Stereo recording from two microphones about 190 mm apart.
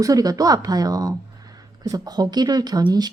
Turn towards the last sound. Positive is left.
turn(degrees=-20)  # may be behind; listen again after turning